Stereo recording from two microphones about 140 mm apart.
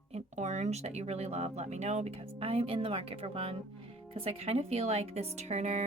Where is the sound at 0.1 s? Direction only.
55° right (ahead or behind).